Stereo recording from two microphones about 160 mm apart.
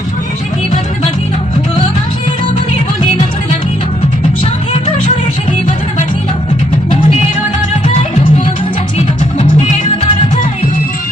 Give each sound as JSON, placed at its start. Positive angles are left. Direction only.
{"t": 9.4, "sound": "music", "side_deg": 40}